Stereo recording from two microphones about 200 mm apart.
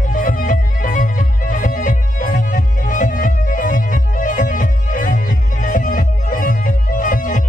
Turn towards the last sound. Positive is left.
turn(degrees=40)  # may be behind; listen again after turning